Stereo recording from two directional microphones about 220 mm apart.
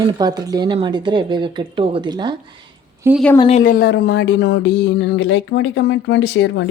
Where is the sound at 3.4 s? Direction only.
30° left (ahead or behind); by 6.6 s 55° left (ahead or behind).